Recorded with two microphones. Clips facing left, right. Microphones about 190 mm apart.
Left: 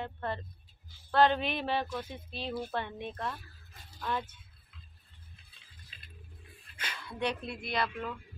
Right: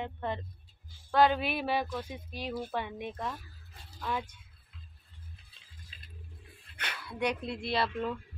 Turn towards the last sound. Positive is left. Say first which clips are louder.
# right 2 dB
turn(degrees=-30)  # may be behind; listen again after turning